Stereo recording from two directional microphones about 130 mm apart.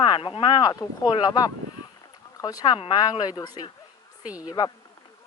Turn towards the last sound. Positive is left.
turn(degrees=35)  # may be behind; listen again after turning